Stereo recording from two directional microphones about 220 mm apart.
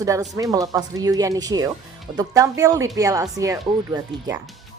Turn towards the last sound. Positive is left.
turn(degrees=-15)  # may be behind; listen again after turning